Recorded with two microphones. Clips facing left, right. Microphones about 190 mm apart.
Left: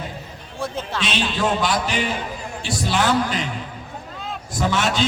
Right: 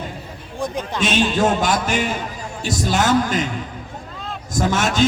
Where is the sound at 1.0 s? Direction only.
45° right (ahead or behind).